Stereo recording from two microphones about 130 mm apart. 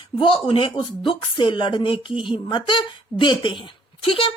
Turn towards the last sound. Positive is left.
turn(degrees=40)  # may be behind; listen again after turning